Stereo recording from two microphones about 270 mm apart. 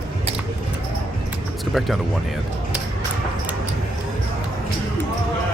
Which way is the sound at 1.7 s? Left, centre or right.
Centre.